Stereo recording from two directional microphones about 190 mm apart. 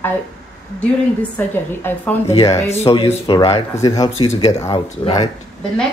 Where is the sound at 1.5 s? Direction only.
10° left (ahead or behind).